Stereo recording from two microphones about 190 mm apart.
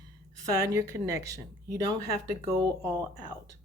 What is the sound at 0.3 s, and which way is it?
A woman's voice, 20° right (ahead or behind).